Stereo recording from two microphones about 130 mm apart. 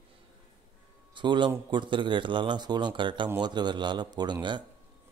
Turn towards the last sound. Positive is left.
turn(degrees=-35)  # may be behind; listen again after turning